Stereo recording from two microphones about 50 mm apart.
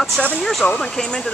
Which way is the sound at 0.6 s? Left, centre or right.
Left.